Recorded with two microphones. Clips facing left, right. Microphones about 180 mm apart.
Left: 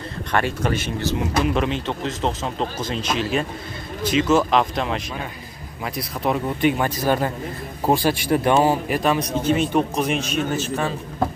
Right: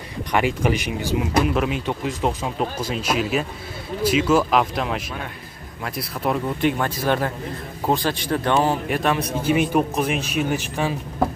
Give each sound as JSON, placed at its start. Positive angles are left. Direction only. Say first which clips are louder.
{"t": 0.3, "sound": "a man's voice", "louder": "right 2 dB", "side_deg": -15}
{"t": 9.4, "sound": "speech", "louder": "right 2 dB", "side_deg": -10}
{"t": 10.5, "sound": "speech", "louder": "even", "side_deg": -15}